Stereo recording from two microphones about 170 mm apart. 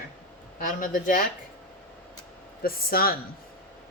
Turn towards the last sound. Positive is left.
turn(degrees=60)  # may be behind; listen again after turning